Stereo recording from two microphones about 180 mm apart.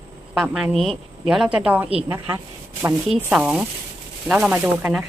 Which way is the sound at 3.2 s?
5° right (ahead or behind).